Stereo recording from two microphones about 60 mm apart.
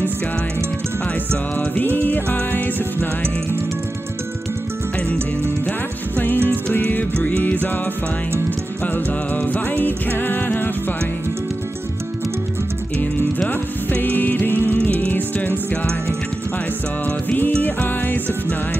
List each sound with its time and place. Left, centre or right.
2.5 s music: left
6.1 s music: left
8.8 s music: left
13.5 s music: left
17.6 s music: left